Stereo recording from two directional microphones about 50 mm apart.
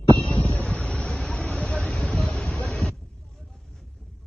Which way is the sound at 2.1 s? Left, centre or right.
Centre.